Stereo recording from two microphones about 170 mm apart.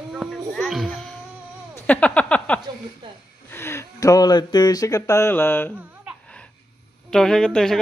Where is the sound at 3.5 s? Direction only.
15° left (ahead or behind).